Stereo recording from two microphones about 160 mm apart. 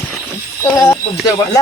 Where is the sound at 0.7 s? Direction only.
20° left (ahead or behind).